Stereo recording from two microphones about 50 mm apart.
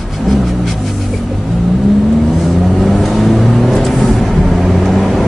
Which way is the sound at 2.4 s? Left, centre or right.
Centre.